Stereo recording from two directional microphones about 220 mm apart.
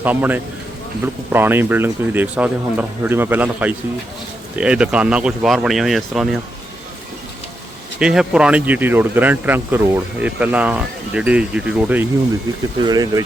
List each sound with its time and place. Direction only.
0.0 s speech: 10° right (ahead or behind)
7.9 s speech: 5° right (ahead or behind)
12.8 s speech: 15° right (ahead or behind)